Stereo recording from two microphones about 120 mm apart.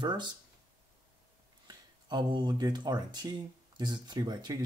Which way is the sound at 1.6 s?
35° right (ahead or behind).